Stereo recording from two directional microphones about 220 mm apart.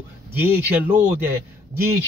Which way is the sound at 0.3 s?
10° right (ahead or behind).